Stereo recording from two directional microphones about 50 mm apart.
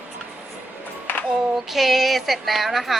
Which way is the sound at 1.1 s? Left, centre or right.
Left.